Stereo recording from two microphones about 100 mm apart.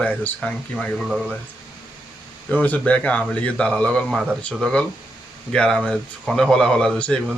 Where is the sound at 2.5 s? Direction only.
15° left (ahead or behind).